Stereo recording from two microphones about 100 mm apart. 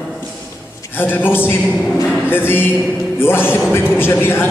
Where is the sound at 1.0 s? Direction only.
20° left (ahead or behind).